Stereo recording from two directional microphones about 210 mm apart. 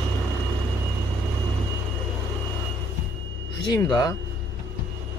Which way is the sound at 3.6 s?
20° left (ahead or behind).